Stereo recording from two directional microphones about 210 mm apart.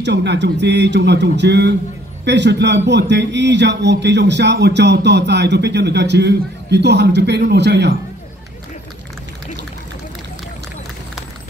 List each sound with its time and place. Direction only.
0.0 s a man's voice: 55° right (ahead or behind)